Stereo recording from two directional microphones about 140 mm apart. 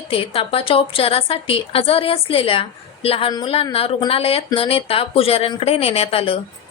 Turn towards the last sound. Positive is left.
turn(degrees=45)  # may be behind; listen again after turning